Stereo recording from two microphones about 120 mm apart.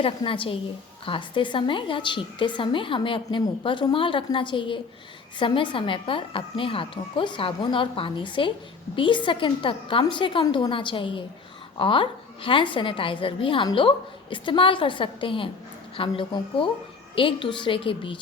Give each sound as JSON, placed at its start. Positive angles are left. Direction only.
{"t": 0.0, "sound": "a woman's voice", "side_deg": 45}